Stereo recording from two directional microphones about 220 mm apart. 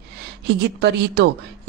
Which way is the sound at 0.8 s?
45° right (ahead or behind).